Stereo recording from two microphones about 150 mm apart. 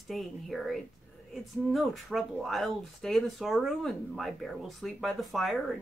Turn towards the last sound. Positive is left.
turn(degrees=0)  # may be behind; listen again after turning